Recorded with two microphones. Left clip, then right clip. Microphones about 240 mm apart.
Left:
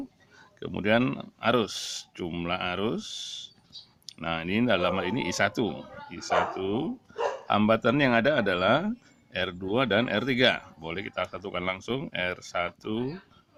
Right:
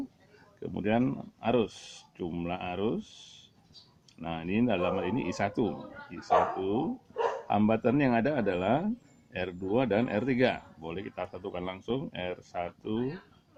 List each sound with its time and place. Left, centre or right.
0.6 s speech: left
4.2 s speech: left